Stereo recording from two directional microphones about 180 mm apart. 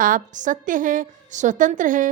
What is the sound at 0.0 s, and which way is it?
A woman's voice, 45° right (ahead or behind).